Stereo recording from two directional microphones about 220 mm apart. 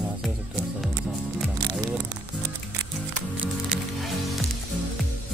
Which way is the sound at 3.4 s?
Centre (ahead or behind).